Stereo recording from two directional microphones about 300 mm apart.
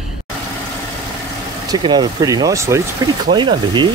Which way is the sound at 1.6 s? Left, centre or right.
Centre.